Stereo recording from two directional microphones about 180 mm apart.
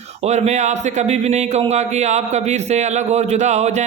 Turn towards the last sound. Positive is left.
turn(degrees=-40)  # may be behind; listen again after turning